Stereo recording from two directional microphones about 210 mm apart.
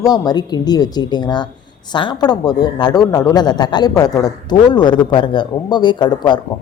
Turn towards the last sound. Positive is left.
turn(degrees=20)  # may be behind; listen again after turning